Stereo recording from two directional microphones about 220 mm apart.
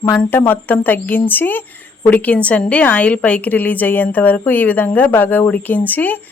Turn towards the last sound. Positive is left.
turn(degrees=10)  # may be behind; listen again after turning